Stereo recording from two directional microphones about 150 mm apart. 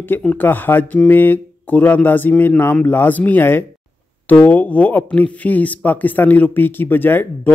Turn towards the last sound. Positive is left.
turn(degrees=15)  # may be behind; listen again after turning